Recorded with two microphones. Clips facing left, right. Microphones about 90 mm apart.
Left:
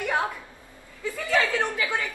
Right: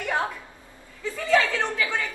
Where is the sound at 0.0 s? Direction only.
20° left (ahead or behind).